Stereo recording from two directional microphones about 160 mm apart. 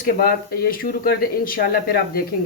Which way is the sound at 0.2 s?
70° left (ahead or behind).